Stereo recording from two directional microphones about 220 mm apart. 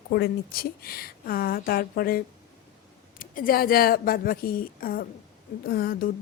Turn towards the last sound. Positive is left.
turn(degrees=40)  # may be behind; listen again after turning